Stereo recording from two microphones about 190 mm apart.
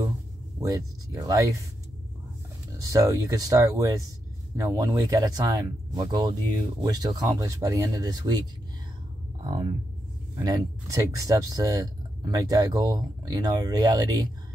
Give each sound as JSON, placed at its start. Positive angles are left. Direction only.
{"t": 0.6, "sound": "speech", "side_deg": -15}
{"t": 2.8, "sound": "speech", "side_deg": -15}
{"t": 10.3, "sound": "speech", "side_deg": -20}